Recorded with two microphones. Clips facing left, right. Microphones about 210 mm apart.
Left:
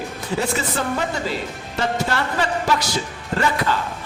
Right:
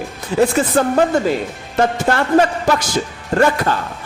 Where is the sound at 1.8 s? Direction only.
50° right (ahead or behind).